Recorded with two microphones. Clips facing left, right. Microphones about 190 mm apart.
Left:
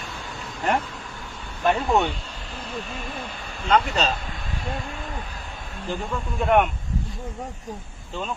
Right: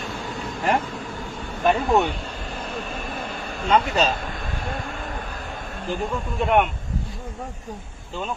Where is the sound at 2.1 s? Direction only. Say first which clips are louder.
Right 5 dB; 55° right (ahead or behind).